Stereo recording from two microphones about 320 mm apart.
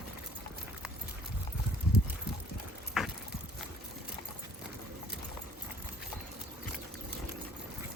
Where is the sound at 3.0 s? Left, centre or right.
Centre.